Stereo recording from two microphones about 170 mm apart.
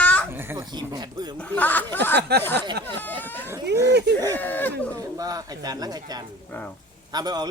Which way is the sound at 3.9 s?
75° right (ahead or behind).